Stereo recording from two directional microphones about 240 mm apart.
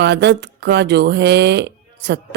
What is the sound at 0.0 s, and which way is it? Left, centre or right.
Speech, right.